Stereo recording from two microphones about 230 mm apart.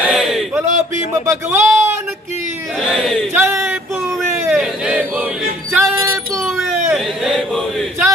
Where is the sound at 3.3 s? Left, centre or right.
Centre.